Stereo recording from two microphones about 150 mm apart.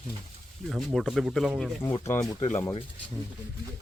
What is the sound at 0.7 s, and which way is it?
Speech, centre (ahead or behind).